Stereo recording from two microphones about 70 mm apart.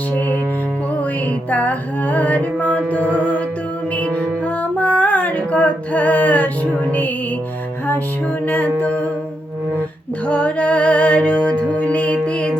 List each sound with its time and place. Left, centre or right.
1.5 s mantra: left
4.8 s mantra: centre
8.4 s mantra: left
10.2 s music: centre